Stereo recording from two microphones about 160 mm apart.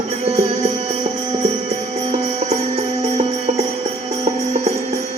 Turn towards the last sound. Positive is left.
turn(degrees=-40)  # may be behind; listen again after turning